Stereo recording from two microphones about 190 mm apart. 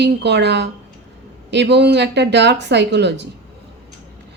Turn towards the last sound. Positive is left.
turn(degrees=-65)  # may be behind; listen again after turning